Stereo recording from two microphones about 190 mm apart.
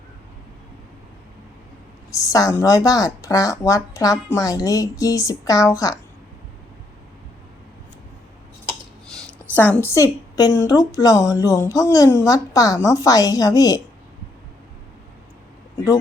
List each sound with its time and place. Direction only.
2.0 s speech: 15° left (ahead or behind)
9.7 s a woman's voice: 15° left (ahead or behind)